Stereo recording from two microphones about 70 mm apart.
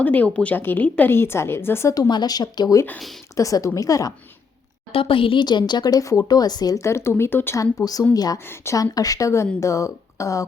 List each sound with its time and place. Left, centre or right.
0.0 s speech: left
1.1 s a woman's voice: left
1.9 s speech: left
3.3 s speech: left
5.4 s speech: left
6.7 s a woman's voice: left
7.5 s speech: left